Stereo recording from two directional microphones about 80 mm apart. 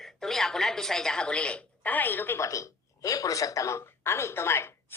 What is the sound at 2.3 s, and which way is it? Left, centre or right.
Speech, left.